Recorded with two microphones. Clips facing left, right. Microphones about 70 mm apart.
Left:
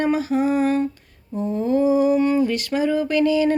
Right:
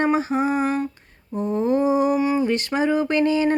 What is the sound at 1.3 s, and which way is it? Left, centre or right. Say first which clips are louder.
Mantra: even; right.